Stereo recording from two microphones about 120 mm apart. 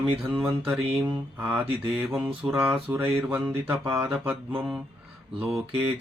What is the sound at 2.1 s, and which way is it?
Mantra, centre (ahead or behind).